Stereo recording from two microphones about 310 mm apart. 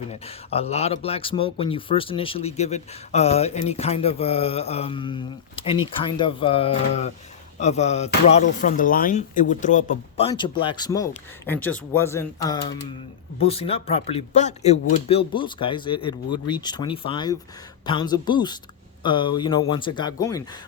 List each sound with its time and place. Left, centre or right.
0.1 s speech: centre